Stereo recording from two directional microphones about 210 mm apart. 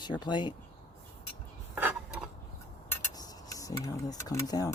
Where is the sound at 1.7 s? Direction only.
10° right (ahead or behind).